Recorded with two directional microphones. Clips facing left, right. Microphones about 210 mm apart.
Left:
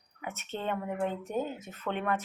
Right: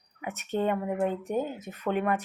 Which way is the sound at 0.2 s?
10° right (ahead or behind).